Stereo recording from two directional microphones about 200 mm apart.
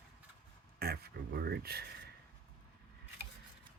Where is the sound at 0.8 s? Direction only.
50° right (ahead or behind).